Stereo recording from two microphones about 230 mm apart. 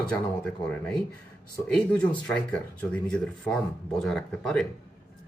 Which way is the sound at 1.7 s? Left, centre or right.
Centre.